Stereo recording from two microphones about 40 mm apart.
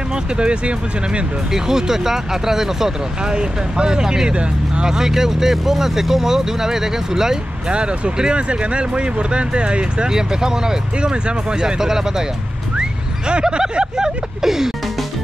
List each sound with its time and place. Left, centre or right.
0.1 s speech: right
1.5 s speech: centre
7.7 s speech: right
13.3 s speech: right